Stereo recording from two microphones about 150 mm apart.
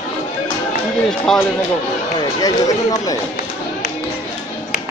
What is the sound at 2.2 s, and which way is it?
Speech, 25° left (ahead or behind).